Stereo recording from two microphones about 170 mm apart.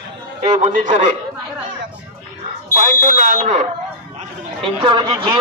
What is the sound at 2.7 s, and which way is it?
Speech, 50° right (ahead or behind).